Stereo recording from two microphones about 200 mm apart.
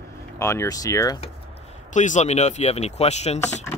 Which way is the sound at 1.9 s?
40° left (ahead or behind).